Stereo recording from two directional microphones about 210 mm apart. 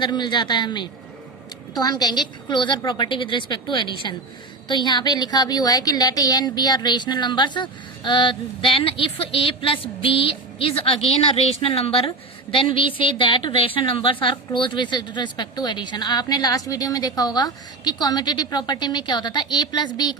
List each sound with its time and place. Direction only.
0.0 s a woman's voice: 20° left (ahead or behind)